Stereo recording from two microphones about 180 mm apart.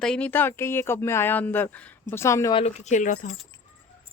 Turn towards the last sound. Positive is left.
turn(degrees=45)  # may be behind; listen again after turning